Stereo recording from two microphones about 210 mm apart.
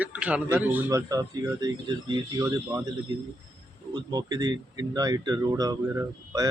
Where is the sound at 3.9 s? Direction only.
20° right (ahead or behind).